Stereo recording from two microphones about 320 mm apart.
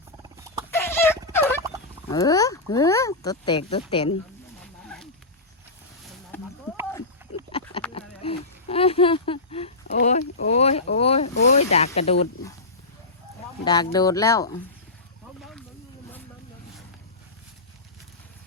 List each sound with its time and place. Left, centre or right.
0.2 s wild animals: centre
0.7 s turkey: centre
2.0 s speech: centre
4.6 s wild animals: centre
6.3 s a sound: centre
7.9 s a sound: centre
11.3 s snake: left
11.7 s speech: centre
13.7 s speech: centre
15.4 s snake: centre